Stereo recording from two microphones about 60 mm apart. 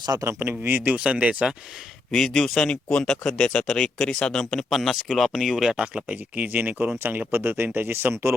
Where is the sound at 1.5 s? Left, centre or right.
Centre.